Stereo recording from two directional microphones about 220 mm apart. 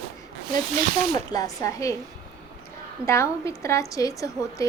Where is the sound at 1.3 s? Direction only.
15° left (ahead or behind).